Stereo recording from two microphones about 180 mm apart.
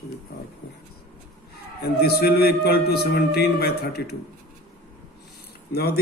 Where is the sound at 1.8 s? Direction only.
60° left (ahead or behind).